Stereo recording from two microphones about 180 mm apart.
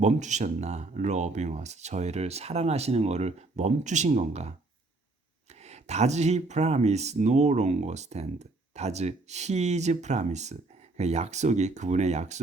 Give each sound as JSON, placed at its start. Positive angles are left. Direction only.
{"t": 0.0, "sound": "speech", "side_deg": -40}
{"t": 5.6, "sound": "speech", "side_deg": -35}